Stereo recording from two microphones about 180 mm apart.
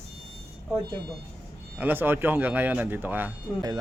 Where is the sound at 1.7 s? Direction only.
10° right (ahead or behind).